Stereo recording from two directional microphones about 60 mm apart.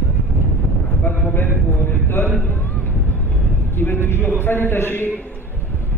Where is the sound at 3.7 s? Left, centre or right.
Left.